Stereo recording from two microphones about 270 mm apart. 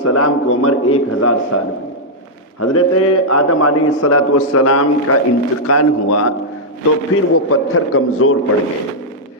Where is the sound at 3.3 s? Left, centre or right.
Left.